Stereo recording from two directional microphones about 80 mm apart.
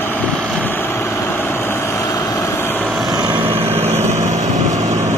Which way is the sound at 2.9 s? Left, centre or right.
Centre.